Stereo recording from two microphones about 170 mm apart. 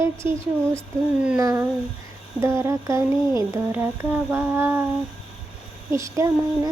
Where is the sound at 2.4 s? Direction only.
15° right (ahead or behind).